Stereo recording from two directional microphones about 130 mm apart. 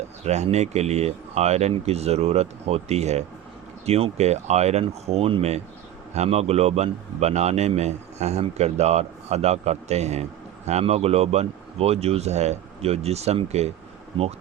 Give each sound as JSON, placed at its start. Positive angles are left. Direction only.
{"t": 0.3, "sound": "a man's voice", "side_deg": -60}
{"t": 14.1, "sound": "speech", "side_deg": -45}